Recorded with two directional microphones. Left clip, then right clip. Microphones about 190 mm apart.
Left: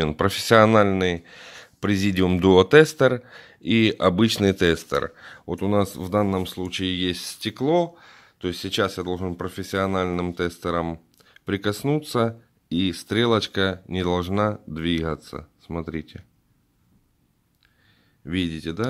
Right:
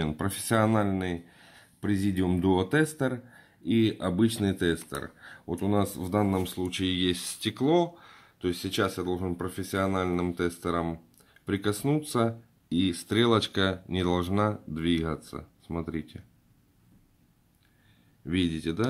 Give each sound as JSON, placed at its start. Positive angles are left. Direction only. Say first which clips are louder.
{"t": 0.0, "sound": "speech", "louder": "left 10 dB", "side_deg": 45}
{"t": 18.2, "sound": "speech", "louder": "left 2 dB", "side_deg": 35}